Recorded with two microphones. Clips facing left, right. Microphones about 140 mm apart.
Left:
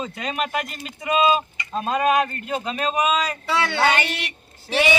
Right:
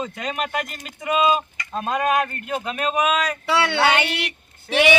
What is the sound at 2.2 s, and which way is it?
Speech, 60° right (ahead or behind).